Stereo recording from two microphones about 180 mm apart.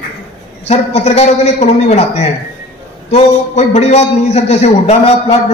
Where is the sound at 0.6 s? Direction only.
35° left (ahead or behind).